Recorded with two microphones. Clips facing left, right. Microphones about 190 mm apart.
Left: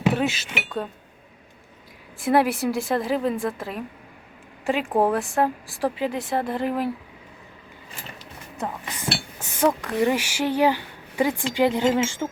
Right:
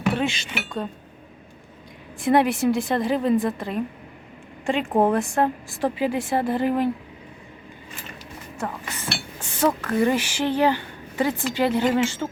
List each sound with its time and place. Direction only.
0.1 s speech: 5° left (ahead or behind)
2.2 s a woman's voice: centre (ahead or behind)
8.5 s speech: 20° left (ahead or behind)
9.4 s dishes: 10° left (ahead or behind)
10.0 s speech: 10° left (ahead or behind)